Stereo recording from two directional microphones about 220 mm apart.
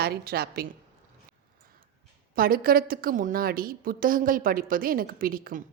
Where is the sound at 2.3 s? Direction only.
40° right (ahead or behind).